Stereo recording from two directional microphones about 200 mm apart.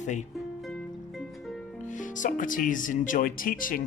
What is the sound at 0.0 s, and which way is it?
Speech, 35° left (ahead or behind).